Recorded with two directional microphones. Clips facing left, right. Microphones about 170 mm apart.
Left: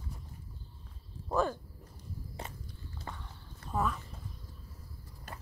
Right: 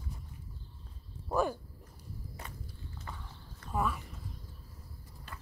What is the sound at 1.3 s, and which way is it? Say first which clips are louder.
Speech: even; 10° right (ahead or behind).